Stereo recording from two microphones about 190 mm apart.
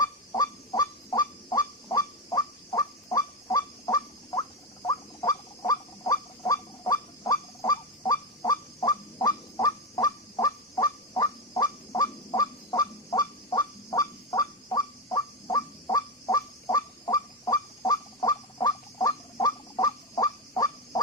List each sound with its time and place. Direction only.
0.0 s goose: 20° left (ahead or behind)